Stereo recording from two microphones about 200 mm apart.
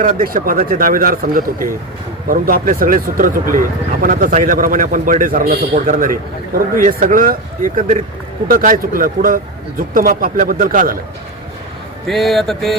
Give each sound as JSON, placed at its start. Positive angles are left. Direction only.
{"t": 0.0, "sound": "speech", "side_deg": -40}
{"t": 12.0, "sound": "a man's voice", "side_deg": 0}